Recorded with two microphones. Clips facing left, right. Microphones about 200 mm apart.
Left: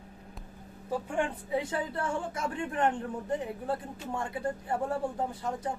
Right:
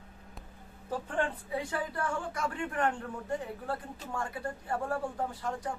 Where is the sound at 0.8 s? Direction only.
10° left (ahead or behind).